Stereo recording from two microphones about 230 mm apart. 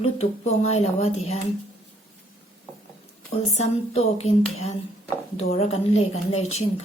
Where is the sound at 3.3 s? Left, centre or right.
Left.